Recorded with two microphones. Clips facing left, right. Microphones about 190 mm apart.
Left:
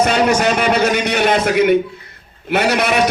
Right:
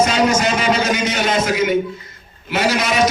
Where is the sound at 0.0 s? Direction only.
60° left (ahead or behind).